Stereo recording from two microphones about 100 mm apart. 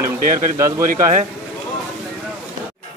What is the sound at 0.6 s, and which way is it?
Speech, 30° right (ahead or behind).